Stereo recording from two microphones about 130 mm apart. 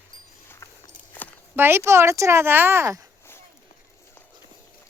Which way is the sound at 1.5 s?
15° right (ahead or behind).